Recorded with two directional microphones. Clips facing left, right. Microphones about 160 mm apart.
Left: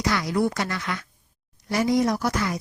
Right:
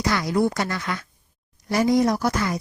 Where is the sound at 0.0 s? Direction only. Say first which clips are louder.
Right 2 dB; 35° right (ahead or behind).